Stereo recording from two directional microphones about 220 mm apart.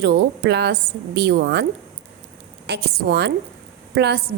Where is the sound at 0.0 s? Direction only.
50° right (ahead or behind).